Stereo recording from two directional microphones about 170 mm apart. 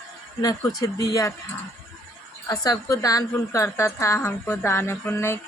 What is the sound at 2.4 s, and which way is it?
A woman's voice, 20° left (ahead or behind).